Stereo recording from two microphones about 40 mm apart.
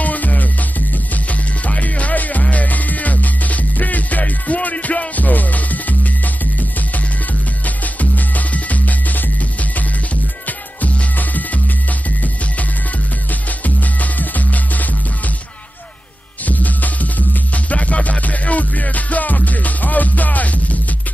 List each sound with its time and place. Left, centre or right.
0.0 s music: left
7.6 s music: left
10.8 s music: left
13.3 s music: left
16.4 s music: left